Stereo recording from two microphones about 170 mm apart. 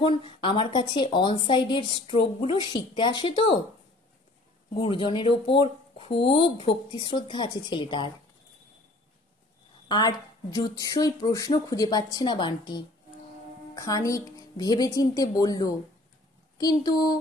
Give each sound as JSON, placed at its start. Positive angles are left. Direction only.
{"t": 0.0, "sound": "speech", "side_deg": 30}
{"t": 4.7, "sound": "speech", "side_deg": 30}
{"t": 9.8, "sound": "a woman's voice", "side_deg": 25}